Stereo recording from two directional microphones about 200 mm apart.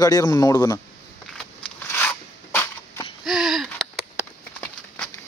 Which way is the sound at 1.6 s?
10° left (ahead or behind).